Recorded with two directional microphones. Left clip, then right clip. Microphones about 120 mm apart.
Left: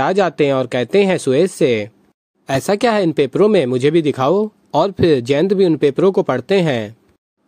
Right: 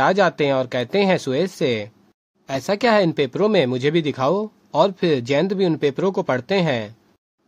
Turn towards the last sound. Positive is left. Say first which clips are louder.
# left 5 dB
turn(degrees=30)  # may be behind; listen again after turning